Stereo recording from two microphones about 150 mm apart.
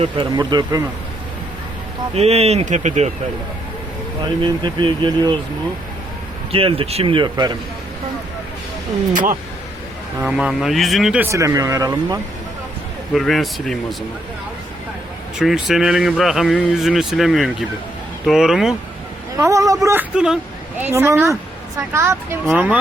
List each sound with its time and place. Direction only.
0.0 s speech: 35° right (ahead or behind)
2.1 s speech: 45° right (ahead or behind)
4.2 s speech: 30° right (ahead or behind)
6.5 s speech: 40° right (ahead or behind)
10.2 s speech: 5° right (ahead or behind)
11.3 s speech: 20° right (ahead or behind)
13.1 s speech: centre (ahead or behind)
15.4 s speech: centre (ahead or behind)
19.4 s a woman's voice: 20° right (ahead or behind)